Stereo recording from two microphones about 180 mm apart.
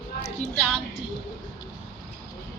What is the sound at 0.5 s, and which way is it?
Speech, centre (ahead or behind).